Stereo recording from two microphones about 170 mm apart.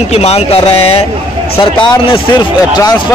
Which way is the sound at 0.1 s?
35° left (ahead or behind).